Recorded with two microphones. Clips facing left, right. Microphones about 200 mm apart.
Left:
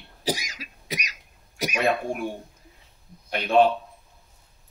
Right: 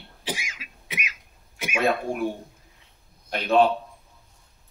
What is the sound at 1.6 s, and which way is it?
Speech, 40° left (ahead or behind).